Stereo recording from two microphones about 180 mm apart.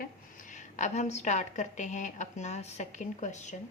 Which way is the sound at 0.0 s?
45° left (ahead or behind).